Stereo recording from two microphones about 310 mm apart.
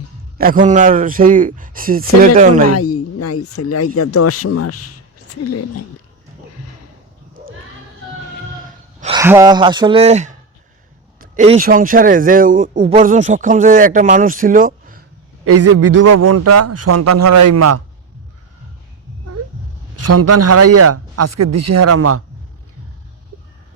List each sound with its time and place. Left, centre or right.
0.3 s a man's voice: right
2.6 s speech: left
9.0 s a man's voice: centre
15.4 s a man's voice: right
20.0 s a man's voice: right